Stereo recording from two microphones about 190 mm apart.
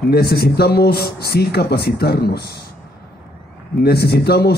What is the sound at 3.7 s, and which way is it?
Speech, 55° left (ahead or behind).